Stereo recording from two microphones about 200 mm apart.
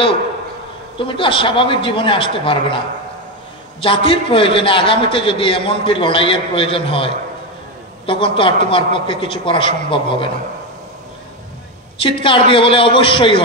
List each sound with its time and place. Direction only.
0.9 s a man's voice: 25° left (ahead or behind)
3.8 s a man's voice: 25° left (ahead or behind)
12.0 s a man's voice: 25° left (ahead or behind)